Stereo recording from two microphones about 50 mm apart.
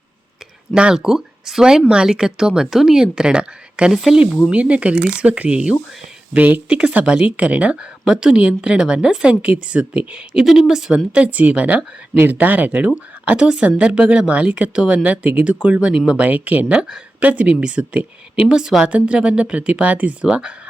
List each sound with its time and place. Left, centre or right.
0.9 s speech: centre
3.9 s speech: centre
4.5 s a woman's voice: right
6.3 s speech: right
6.7 s a woman's voice: right
10.4 s speech: centre
10.9 s a woman's voice: right
13.2 s a woman's voice: right
16.7 s a woman's voice: right
18.9 s a woman's voice: right